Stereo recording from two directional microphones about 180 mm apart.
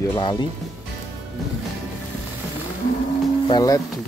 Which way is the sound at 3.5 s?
20° left (ahead or behind).